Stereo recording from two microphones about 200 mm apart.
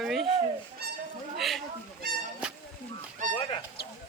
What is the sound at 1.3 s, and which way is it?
Speech, centre (ahead or behind).